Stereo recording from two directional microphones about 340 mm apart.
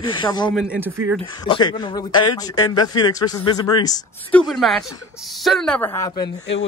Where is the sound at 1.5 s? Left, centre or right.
Centre.